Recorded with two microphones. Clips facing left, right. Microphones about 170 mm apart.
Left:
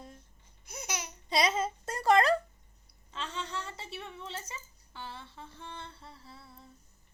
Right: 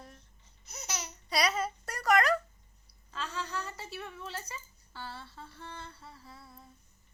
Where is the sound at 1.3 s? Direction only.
25° left (ahead or behind).